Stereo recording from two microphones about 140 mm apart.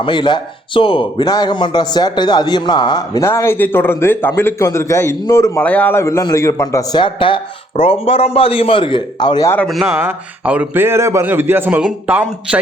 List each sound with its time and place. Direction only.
0.0 s a man's voice: 35° left (ahead or behind)
3.2 s a man's voice: 20° left (ahead or behind)
7.0 s a man's voice: 35° left (ahead or behind)
9.8 s a man's voice: 10° right (ahead or behind)